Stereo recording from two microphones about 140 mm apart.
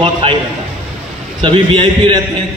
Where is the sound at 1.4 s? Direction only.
35° right (ahead or behind).